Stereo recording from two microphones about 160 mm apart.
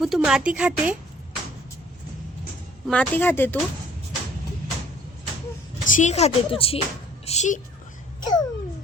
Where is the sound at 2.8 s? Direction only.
Centre (ahead or behind).